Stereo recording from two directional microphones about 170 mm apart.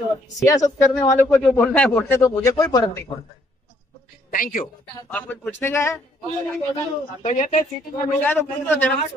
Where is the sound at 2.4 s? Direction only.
25° left (ahead or behind).